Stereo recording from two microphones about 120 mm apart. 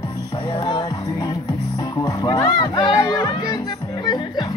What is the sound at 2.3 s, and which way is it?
Music, 35° left (ahead or behind).